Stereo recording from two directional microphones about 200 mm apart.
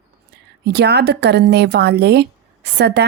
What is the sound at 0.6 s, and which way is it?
A woman's voice, 55° right (ahead or behind).